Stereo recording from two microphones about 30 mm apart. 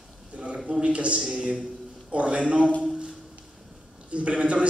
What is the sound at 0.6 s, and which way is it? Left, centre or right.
A man's voice, right.